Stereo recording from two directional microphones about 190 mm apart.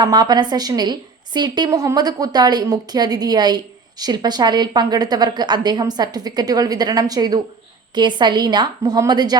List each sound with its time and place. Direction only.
0.0 s a woman's voice: 20° right (ahead or behind)